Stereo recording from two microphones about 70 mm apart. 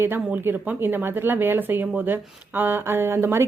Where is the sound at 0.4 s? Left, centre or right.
Right.